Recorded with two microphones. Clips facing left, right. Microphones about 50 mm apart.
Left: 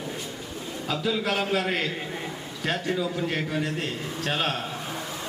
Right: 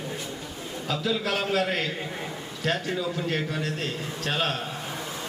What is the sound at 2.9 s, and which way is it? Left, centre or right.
A man's voice, centre.